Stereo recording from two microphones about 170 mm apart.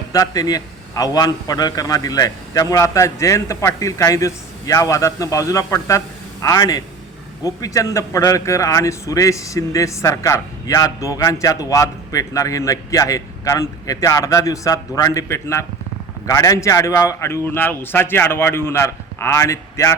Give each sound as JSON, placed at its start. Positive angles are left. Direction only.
{"t": 0.1, "sound": "a man's voice", "side_deg": 20}